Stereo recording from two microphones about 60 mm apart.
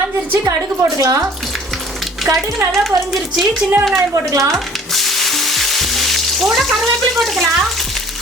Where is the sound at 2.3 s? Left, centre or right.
Right.